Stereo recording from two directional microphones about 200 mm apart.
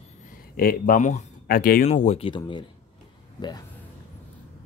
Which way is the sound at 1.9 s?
35° left (ahead or behind).